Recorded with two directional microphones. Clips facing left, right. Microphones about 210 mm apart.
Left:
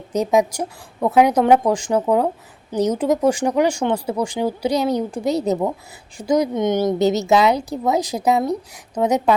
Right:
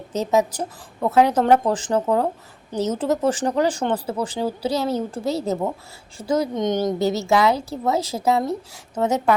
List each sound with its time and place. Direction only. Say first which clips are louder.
0.1 s speech: left 3 dB; 15° left (ahead or behind)